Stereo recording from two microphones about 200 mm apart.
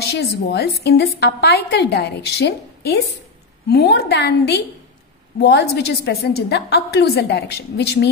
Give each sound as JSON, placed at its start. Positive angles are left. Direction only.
{"t": 0.0, "sound": "a woman's voice", "side_deg": 55}